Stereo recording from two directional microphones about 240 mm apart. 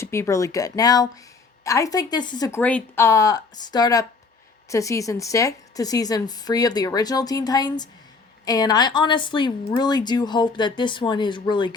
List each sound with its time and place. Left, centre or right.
0.0 s a woman's voice: centre